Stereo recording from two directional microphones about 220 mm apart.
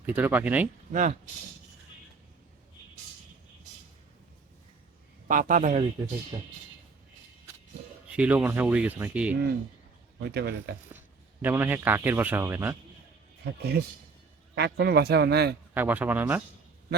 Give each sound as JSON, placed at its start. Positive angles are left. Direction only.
{"t": 0.0, "sound": "speech", "side_deg": -10}
{"t": 0.9, "sound": "a man's voice", "side_deg": -35}
{"t": 5.3, "sound": "a man's voice", "side_deg": -40}
{"t": 6.3, "sound": "speech", "side_deg": -15}
{"t": 8.0, "sound": "speech", "side_deg": -5}
{"t": 10.2, "sound": "a man's voice", "side_deg": -50}
{"t": 11.4, "sound": "speech", "side_deg": -10}
{"t": 13.4, "sound": "a man's voice", "side_deg": -50}
{"t": 15.7, "sound": "speech", "side_deg": -10}